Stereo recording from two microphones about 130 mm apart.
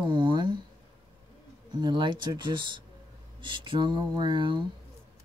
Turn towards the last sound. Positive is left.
turn(degrees=-35)  # may be behind; listen again after turning